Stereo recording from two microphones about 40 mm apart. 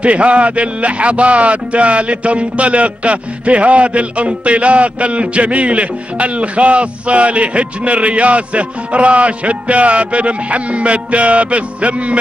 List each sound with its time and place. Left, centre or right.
0.0 s speech: right